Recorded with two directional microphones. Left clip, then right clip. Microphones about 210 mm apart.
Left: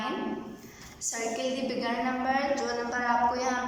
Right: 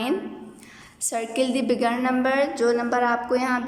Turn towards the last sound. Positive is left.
turn(degrees=-55)  # may be behind; listen again after turning